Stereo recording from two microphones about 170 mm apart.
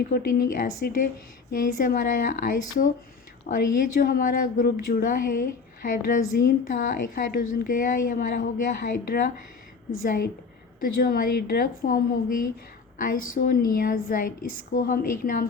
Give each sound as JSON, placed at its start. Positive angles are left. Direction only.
{"t": 0.1, "sound": "a woman's voice", "side_deg": 60}
{"t": 10.8, "sound": "a woman's voice", "side_deg": 55}
{"t": 13.0, "sound": "a woman's voice", "side_deg": 55}